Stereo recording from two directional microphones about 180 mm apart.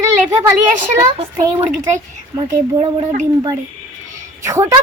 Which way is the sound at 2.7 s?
35° right (ahead or behind).